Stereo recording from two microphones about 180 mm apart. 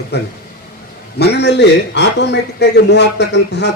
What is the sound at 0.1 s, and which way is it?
A man's voice, 65° left (ahead or behind).